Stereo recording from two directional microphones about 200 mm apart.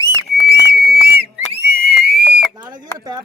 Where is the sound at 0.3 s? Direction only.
50° right (ahead or behind).